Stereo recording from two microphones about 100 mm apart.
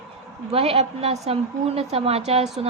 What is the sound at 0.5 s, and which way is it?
A woman's voice, 85° right.